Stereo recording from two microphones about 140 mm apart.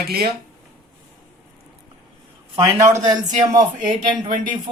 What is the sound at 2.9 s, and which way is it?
Speech, 25° right (ahead or behind).